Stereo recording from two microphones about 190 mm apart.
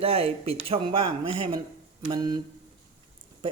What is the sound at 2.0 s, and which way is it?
Speech, 20° right (ahead or behind).